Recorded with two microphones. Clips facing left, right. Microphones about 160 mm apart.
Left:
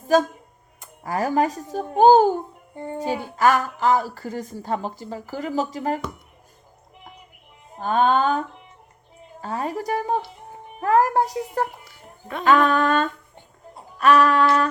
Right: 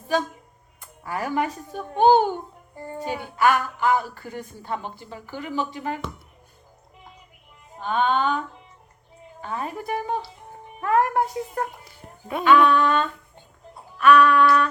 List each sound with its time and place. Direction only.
1.0 s a woman's voice: 40° left (ahead or behind)
2.7 s a child's voice: 25° left (ahead or behind)
3.0 s a woman's voice: 35° left (ahead or behind)
7.8 s a woman's voice: 40° left (ahead or behind)
11.9 s dog: 10° right (ahead or behind)
12.5 s a sound: 45° left (ahead or behind)
14.0 s a woman's voice: 35° left (ahead or behind)